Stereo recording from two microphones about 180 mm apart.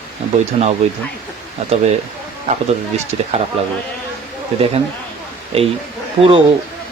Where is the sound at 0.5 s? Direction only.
40° right (ahead or behind).